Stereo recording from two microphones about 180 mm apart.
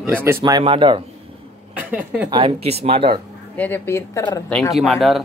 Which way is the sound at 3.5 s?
10° left (ahead or behind).